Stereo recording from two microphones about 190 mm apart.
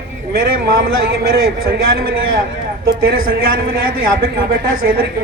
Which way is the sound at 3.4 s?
50° right (ahead or behind).